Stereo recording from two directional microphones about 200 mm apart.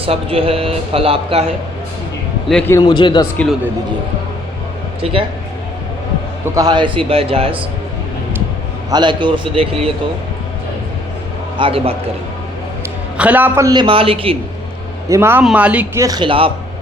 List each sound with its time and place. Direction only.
0.0 s speech: 30° right (ahead or behind)
2.5 s a man's voice: 5° left (ahead or behind)
2.7 s a man's voice: 20° left (ahead or behind)
5.0 s speech: 30° right (ahead or behind)
6.4 s speech: 20° right (ahead or behind)
8.9 s speech: 20° right (ahead or behind)
11.5 s speech: 25° right (ahead or behind)
13.1 s speech: 5° right (ahead or behind); by 14.3 s 30° right (ahead or behind)
15.1 s speech: 10° right (ahead or behind)
16.0 s speech: 20° right (ahead or behind)